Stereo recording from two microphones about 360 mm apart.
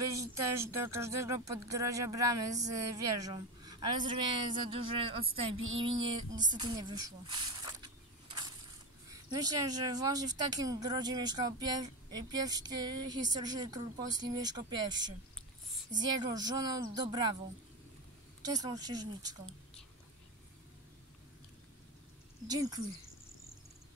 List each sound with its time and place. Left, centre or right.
0.0 s speech: centre
5.6 s a sound: right
6.4 s a sound: centre
9.1 s speech: centre
18.4 s speech: centre
22.5 s speech: centre